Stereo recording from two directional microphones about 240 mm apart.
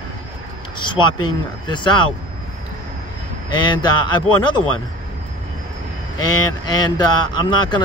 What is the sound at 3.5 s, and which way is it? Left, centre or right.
Speech, centre.